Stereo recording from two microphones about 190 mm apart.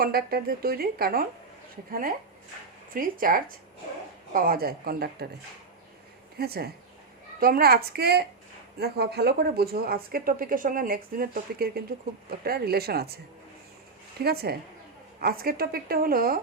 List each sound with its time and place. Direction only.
0.0 s speech: 55° right (ahead or behind)
6.4 s a woman's voice: 55° right (ahead or behind)
14.2 s speech: 50° right (ahead or behind)